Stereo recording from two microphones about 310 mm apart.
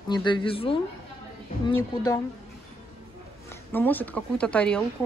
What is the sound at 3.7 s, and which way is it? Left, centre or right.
Speech, centre.